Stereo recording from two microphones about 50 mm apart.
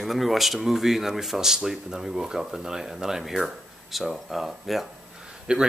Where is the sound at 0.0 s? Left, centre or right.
Centre.